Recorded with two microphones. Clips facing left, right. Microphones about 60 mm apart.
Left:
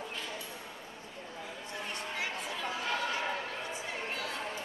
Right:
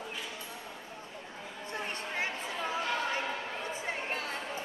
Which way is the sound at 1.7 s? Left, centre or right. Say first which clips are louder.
Right 3 dB; right.